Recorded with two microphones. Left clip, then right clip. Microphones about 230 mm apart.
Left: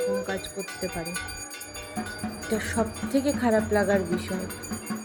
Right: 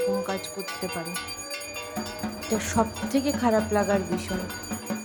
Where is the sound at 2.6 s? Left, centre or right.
Centre.